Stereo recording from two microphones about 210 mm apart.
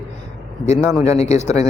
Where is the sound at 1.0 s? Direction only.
30° left (ahead or behind).